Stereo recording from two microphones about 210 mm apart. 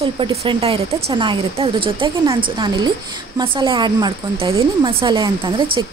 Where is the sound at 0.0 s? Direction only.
25° right (ahead or behind).